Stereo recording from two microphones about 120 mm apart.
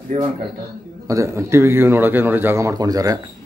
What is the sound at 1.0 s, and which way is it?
Speech, 25° right (ahead or behind).